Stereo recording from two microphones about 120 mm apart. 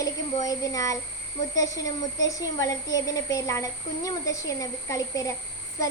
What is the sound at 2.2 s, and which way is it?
A woman's voice, 30° left (ahead or behind).